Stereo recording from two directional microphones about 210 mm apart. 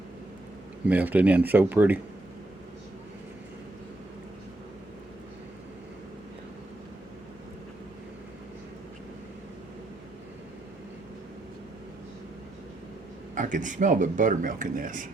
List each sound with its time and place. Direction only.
0.9 s speech: 5° right (ahead or behind)
13.3 s speech: 35° right (ahead or behind)